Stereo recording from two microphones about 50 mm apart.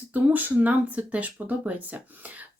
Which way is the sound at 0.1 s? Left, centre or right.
Right.